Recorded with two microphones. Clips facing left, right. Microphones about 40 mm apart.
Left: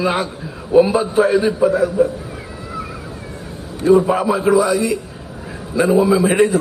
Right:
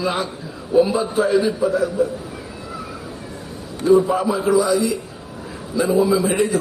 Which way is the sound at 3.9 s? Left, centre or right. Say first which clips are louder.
Even; left.